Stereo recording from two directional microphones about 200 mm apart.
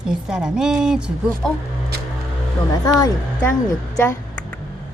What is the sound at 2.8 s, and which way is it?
Speech, 15° left (ahead or behind).